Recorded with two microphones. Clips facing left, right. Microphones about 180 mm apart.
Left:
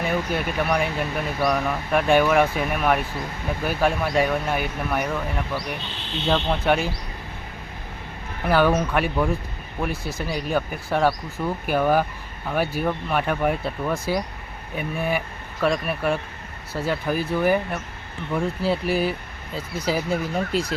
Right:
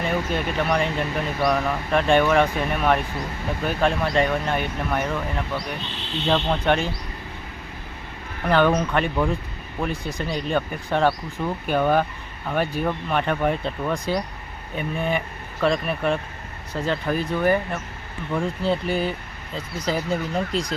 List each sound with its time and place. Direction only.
0.0 s speech: 5° left (ahead or behind)
6.2 s speech: 5° left (ahead or behind)
8.4 s speech: 5° left (ahead or behind)